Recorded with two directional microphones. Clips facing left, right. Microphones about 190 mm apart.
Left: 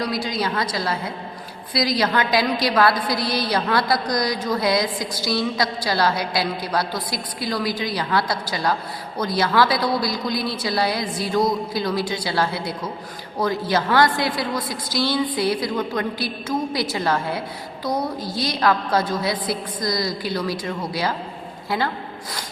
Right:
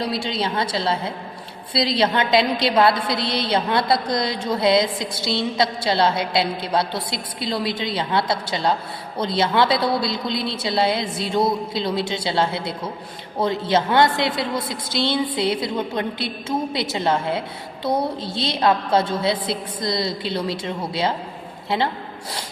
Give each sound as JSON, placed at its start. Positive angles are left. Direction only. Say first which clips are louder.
{"t": 0.0, "sound": "a woman's voice", "louder": "even", "side_deg": -25}